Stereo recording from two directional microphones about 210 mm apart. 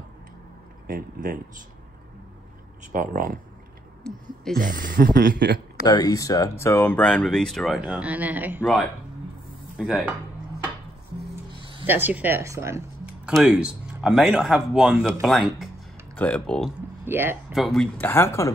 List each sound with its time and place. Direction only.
0.8 s speech: 45° right (ahead or behind)
2.9 s speech: 40° right (ahead or behind)
4.1 s speech: 5° left (ahead or behind)
4.6 s speech: 40° right (ahead or behind)
5.9 s speech: 20° left (ahead or behind); by 10.0 s centre (ahead or behind)
11.8 s speech: 10° right (ahead or behind)
17.0 s speech: 10° right (ahead or behind)
17.6 s speech: centre (ahead or behind)